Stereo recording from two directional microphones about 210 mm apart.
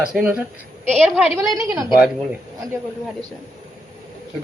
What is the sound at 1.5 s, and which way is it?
Speech, 15° right (ahead or behind).